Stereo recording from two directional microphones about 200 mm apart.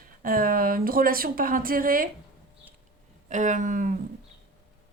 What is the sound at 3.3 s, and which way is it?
Speech, 40° right (ahead or behind).